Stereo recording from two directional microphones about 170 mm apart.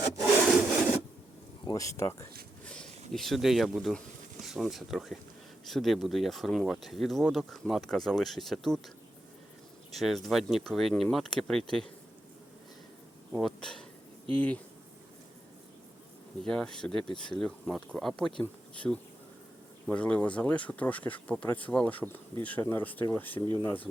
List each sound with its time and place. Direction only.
0.2 s wood: 5° left (ahead or behind)
1.6 s speech: 20° left (ahead or behind)
2.6 s speech: 5° left (ahead or behind)
9.9 s speech: centre (ahead or behind)
13.3 s speech: centre (ahead or behind)
16.4 s speech: 5° left (ahead or behind)